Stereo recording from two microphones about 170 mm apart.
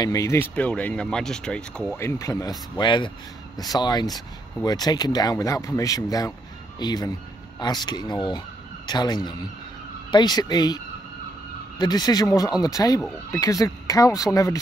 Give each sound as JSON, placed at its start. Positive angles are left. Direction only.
{"t": 0.0, "sound": "speech", "side_deg": 20}
{"t": 2.0, "sound": "speech", "side_deg": 15}
{"t": 11.8, "sound": "speech", "side_deg": 25}